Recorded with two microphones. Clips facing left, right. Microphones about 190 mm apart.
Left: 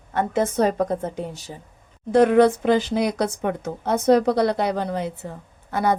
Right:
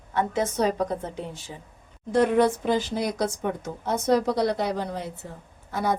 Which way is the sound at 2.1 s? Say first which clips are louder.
Left 5 dB; 70° left (ahead or behind).